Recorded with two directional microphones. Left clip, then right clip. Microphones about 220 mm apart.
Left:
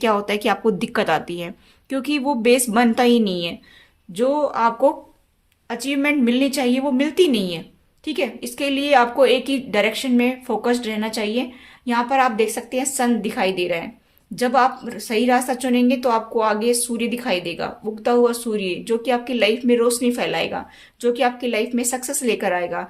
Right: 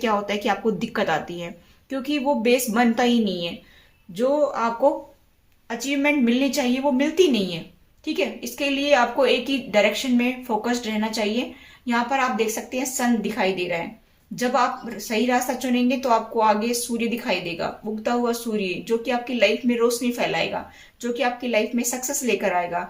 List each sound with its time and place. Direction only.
0.0 s a woman's voice: 45° left (ahead or behind)